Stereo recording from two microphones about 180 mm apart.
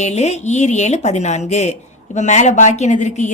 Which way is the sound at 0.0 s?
40° left (ahead or behind).